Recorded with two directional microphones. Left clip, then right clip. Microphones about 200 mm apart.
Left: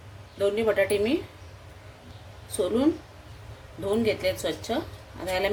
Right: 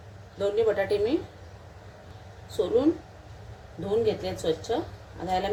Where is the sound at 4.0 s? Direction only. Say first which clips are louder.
Left 2 dB; 50° left (ahead or behind).